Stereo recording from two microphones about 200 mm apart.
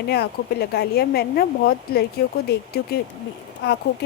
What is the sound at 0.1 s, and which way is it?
Speech, 55° left (ahead or behind).